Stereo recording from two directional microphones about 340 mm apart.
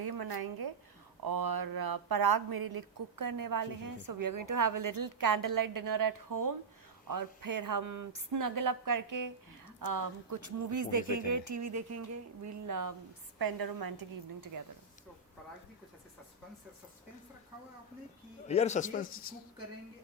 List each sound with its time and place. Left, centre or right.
0.0 s speech: right
13.4 s a woman's voice: right
18.4 s a man's voice: centre